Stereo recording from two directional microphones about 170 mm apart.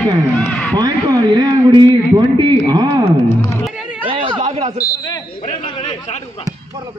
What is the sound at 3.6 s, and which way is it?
Music, 5° right (ahead or behind).